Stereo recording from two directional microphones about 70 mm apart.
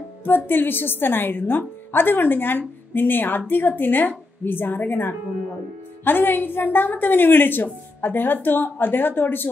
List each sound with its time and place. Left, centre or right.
0.5 s a woman's voice: left